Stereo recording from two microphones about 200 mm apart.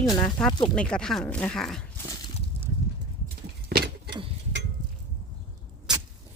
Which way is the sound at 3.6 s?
55° right (ahead or behind).